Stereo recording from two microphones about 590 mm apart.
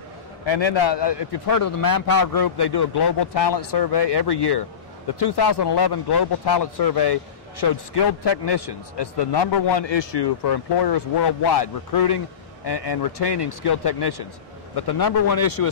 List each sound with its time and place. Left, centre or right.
0.5 s a man's voice: left